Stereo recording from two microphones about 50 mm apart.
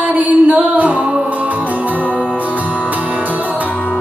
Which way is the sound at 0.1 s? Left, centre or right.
Right.